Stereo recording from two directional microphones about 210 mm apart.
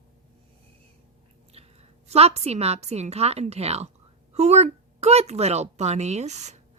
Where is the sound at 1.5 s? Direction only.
30° right (ahead or behind).